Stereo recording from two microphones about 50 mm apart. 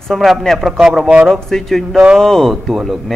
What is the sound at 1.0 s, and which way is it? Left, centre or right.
Speech, centre.